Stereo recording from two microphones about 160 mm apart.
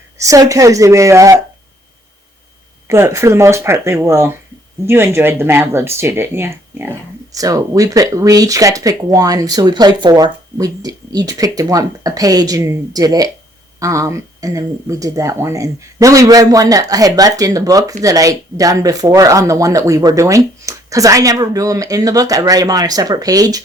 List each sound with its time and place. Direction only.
0.2 s speech: 20° right (ahead or behind)
2.8 s speech: 15° right (ahead or behind)